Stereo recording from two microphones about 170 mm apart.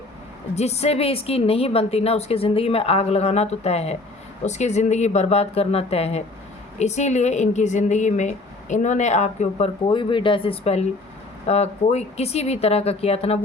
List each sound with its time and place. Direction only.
0.5 s a woman's voice: 40° left (ahead or behind)